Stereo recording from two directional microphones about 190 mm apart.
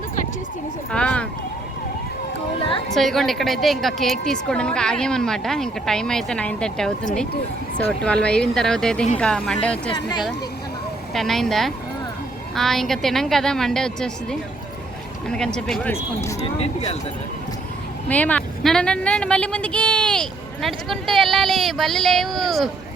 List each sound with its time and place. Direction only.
0.9 s a sound: 5° left (ahead or behind)
2.9 s speech: centre (ahead or behind)
9.9 s speech: 25° left (ahead or behind)
11.1 s speech: centre (ahead or behind)
16.6 s speech: 30° left (ahead or behind)
18.1 s speech: 5° left (ahead or behind)